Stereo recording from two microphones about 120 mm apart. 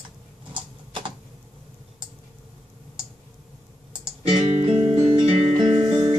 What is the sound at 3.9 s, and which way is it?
Guitar, 50° right (ahead or behind).